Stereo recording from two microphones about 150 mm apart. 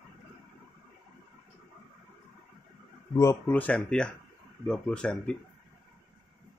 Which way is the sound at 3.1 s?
15° left (ahead or behind).